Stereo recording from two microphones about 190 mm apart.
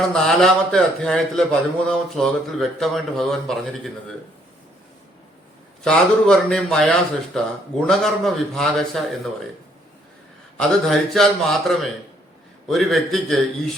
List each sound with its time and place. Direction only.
0.1 s a man's voice: 5° left (ahead or behind)
5.8 s a man's voice: 5° left (ahead or behind)
10.6 s a man's voice: centre (ahead or behind)